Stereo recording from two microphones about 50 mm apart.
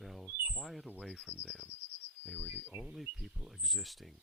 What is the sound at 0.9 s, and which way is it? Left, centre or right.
Speech, left.